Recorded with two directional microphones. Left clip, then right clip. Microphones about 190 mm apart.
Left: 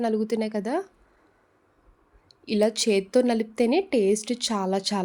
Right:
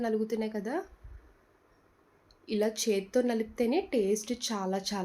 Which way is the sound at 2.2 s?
55° left (ahead or behind).